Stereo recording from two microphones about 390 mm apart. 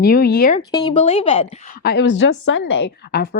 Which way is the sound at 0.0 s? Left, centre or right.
Left.